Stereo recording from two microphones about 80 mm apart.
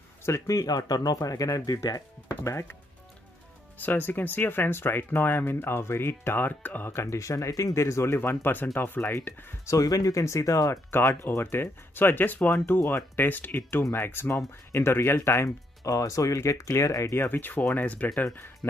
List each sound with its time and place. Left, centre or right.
0.5 s speech: left
2.4 s speech: left
9.8 s speech: left
11.2 s speech: left
18.2 s speech: left